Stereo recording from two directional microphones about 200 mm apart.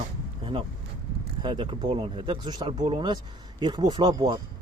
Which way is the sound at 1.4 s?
25° right (ahead or behind).